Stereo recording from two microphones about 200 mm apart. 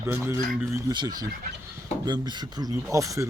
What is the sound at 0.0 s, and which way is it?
Speech, 10° right (ahead or behind).